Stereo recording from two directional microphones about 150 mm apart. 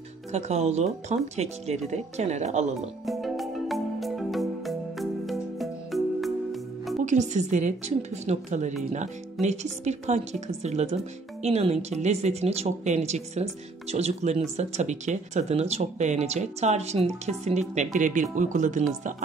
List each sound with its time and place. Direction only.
0.3 s speech: 50° right (ahead or behind)
3.1 s music: centre (ahead or behind)
7.0 s speech: 55° right (ahead or behind)